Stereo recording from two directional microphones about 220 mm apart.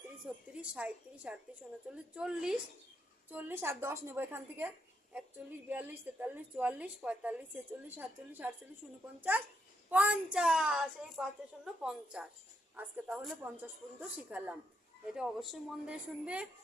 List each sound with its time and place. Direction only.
0.3 s a woman's voice: 5° right (ahead or behind)
9.9 s a woman's voice: 5° right (ahead or behind)